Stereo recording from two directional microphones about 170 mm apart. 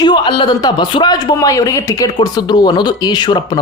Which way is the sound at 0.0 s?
25° left (ahead or behind).